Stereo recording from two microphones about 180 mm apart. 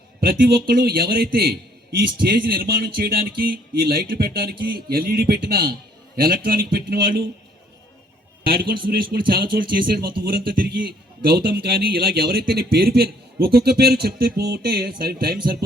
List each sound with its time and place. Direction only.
0.2 s speech: 60° right (ahead or behind)
8.4 s speech: 60° right (ahead or behind)